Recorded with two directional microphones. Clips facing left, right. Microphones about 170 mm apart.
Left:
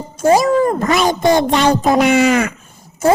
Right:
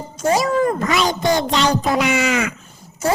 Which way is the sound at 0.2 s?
45° left (ahead or behind).